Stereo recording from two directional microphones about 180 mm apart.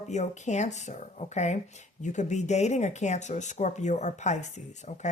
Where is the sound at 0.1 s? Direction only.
40° left (ahead or behind).